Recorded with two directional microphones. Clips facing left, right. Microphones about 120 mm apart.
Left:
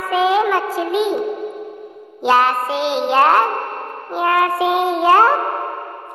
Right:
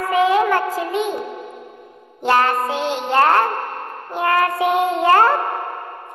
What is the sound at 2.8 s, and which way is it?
Speech, 90° left.